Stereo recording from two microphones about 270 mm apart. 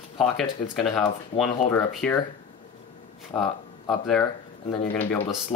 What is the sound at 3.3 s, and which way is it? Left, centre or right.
Speech, centre.